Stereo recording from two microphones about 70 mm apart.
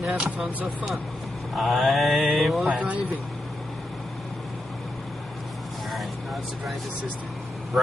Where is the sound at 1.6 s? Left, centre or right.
Centre.